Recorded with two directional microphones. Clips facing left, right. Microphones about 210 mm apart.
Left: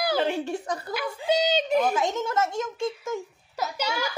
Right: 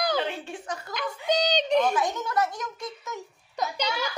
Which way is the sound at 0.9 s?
10° left (ahead or behind).